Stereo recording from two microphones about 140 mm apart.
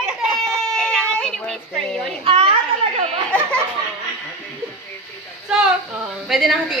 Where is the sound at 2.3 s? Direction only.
40° right (ahead or behind).